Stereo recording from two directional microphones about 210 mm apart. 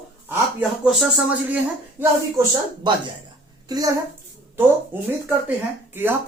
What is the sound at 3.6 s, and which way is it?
Speech, 20° right (ahead or behind).